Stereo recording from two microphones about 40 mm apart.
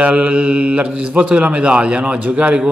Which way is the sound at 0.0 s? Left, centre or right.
Right.